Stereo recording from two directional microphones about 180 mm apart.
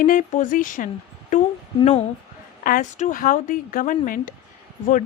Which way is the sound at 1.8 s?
35° left (ahead or behind).